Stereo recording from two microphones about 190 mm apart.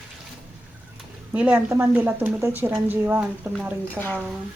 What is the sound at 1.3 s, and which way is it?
A woman's voice, 10° right (ahead or behind).